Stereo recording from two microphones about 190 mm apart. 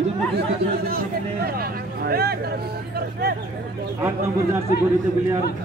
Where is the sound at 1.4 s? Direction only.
55° right (ahead or behind).